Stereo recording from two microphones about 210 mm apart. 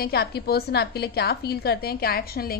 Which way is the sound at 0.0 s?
50° left (ahead or behind).